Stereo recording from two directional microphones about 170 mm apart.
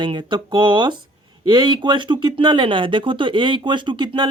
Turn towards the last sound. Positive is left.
turn(degrees=-25)  # may be behind; listen again after turning